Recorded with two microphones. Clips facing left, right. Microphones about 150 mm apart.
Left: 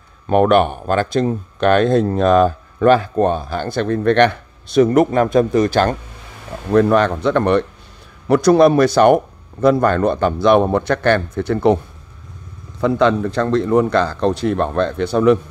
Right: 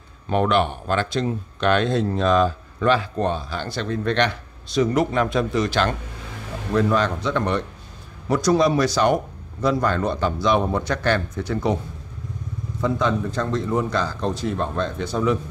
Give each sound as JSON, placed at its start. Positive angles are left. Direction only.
{"t": 0.3, "sound": "speech", "side_deg": 50}
{"t": 6.7, "sound": "speech", "side_deg": 60}
{"t": 12.8, "sound": "a man's voice", "side_deg": 70}